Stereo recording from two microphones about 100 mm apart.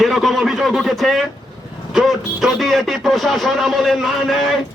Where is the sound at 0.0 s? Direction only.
Centre (ahead or behind).